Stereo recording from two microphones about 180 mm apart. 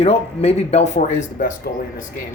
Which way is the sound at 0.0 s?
35° left (ahead or behind).